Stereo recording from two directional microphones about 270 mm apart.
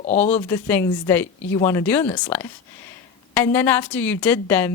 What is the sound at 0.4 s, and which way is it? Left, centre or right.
A woman's voice, centre.